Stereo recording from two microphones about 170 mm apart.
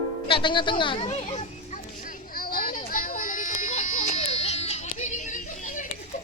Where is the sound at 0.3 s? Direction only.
30° left (ahead or behind).